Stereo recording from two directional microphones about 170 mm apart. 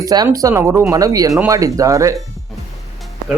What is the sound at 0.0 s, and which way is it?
Speech, 20° right (ahead or behind).